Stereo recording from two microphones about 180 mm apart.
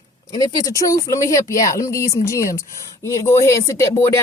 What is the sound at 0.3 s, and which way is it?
Speech, 20° left (ahead or behind).